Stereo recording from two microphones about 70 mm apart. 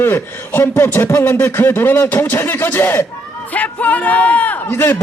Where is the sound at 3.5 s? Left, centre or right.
Left.